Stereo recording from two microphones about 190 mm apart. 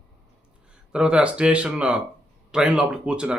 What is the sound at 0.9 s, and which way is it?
Speech, 5° right (ahead or behind).